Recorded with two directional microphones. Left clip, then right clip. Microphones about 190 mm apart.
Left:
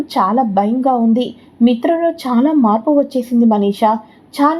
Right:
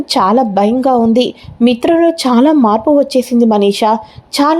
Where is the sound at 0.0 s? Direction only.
25° right (ahead or behind).